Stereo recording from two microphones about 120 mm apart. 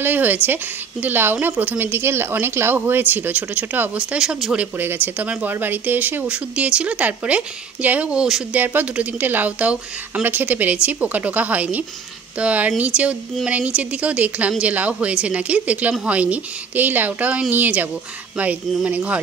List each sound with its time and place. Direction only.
0.0 s speech: 15° right (ahead or behind)